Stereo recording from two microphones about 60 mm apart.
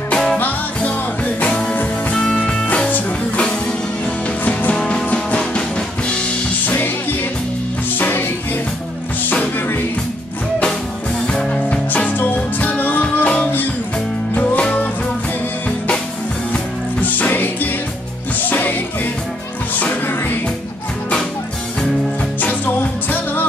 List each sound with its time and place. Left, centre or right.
0.4 s music: left
2.2 s music: centre; by 4.7 s left
4.7 s music: centre
6.6 s music: left
9.3 s music: left
11.2 s music: centre
12.1 s music: left
17.0 s music: left
22.4 s music: left